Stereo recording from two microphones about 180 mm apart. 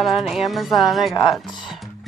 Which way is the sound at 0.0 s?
Centre (ahead or behind).